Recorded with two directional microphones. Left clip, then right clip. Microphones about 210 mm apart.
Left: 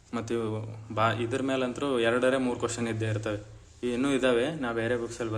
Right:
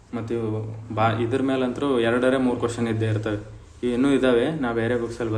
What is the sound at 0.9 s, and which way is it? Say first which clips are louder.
Speech: right 5 dB; 10° left (ahead or behind).